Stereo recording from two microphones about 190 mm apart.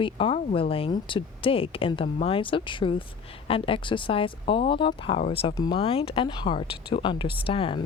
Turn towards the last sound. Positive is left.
turn(degrees=30)  # may be behind; listen again after turning